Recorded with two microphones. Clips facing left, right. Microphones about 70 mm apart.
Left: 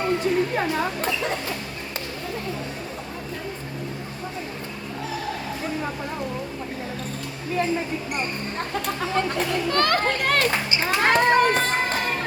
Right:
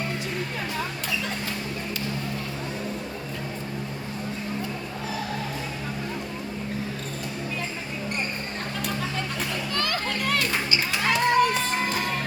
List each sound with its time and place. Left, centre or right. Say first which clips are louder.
9.6 s children playing: left 9 dB; left